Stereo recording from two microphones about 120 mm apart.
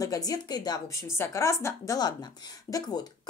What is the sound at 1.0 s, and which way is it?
Speech, 20° left (ahead or behind).